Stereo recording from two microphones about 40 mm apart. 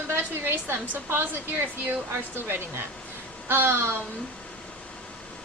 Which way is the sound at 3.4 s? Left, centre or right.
Right.